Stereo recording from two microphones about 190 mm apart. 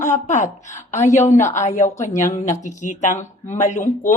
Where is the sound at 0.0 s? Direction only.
40° left (ahead or behind).